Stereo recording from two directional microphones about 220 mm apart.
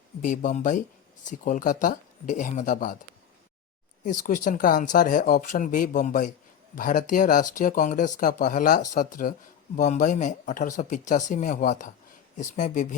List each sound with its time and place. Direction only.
0.2 s speech: 35° left (ahead or behind)
4.0 s speech: 35° left (ahead or behind)